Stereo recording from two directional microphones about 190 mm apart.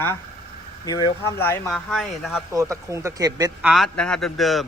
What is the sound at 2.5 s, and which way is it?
Speech, 15° right (ahead or behind).